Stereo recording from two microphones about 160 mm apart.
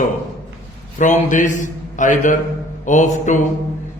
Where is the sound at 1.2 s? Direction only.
50° left (ahead or behind).